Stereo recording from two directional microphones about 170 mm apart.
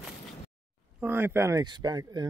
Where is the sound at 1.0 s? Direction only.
10° right (ahead or behind).